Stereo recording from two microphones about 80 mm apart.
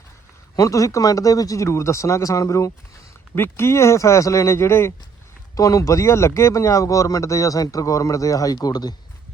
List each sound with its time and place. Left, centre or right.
0.5 s speech: left
3.3 s speech: left
5.5 s speech: left